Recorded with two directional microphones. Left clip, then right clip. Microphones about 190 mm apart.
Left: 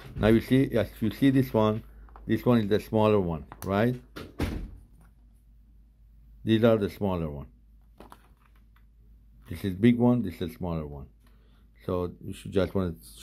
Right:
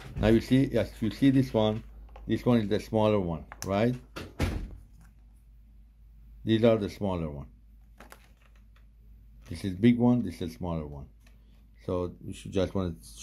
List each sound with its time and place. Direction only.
0.2 s speech: 20° left (ahead or behind)
6.4 s speech: 15° left (ahead or behind)
9.5 s speech: 20° left (ahead or behind)